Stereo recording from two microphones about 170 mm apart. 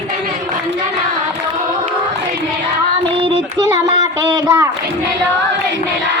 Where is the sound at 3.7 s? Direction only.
20° right (ahead or behind).